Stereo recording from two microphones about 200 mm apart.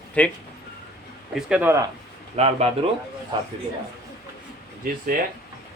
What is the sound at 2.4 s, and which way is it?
Speech, 30° right (ahead or behind).